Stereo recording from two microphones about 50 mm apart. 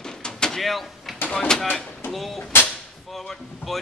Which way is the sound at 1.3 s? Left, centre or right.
Centre.